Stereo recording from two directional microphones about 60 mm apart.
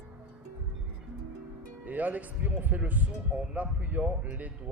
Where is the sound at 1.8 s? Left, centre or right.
Right.